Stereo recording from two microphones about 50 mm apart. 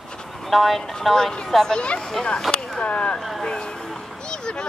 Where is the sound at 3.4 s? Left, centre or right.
Centre.